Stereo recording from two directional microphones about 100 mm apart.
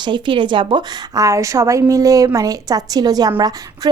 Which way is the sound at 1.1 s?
35° right (ahead or behind).